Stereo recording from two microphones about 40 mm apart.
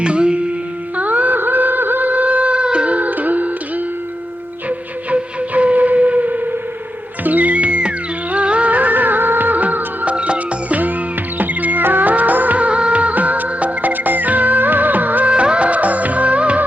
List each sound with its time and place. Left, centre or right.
0.0 s music: right
0.9 s music: right
1.4 s a sound: right
3.1 s music: right
5.1 s music: right
11.3 s music of bollywood: right
15.3 s music of bollywood: right